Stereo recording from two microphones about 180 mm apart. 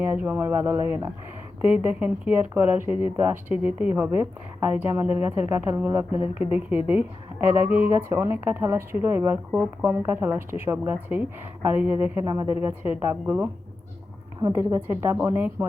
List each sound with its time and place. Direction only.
0.0 s a woman's voice: 10° right (ahead or behind)
6.1 s a woman's voice: 35° left (ahead or behind)
7.4 s a woman's voice: 10° right (ahead or behind)
14.5 s a woman's voice: 15° right (ahead or behind)